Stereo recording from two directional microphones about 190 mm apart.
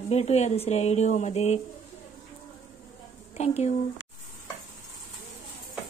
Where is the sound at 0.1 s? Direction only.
35° left (ahead or behind).